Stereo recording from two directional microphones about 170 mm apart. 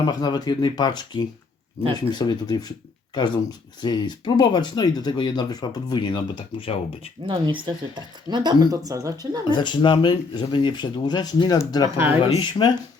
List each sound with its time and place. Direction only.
0.0 s speech: 25° left (ahead or behind)
3.8 s speech: 25° left (ahead or behind)
7.3 s speech: 30° right (ahead or behind)
9.5 s speech: 25° left (ahead or behind)
11.9 s speech: 10° right (ahead or behind)
12.4 s speech: 25° left (ahead or behind)